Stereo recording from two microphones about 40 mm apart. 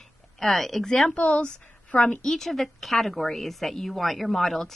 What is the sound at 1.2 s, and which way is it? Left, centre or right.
Speech, left.